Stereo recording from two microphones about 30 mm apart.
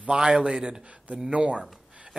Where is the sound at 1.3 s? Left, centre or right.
Right.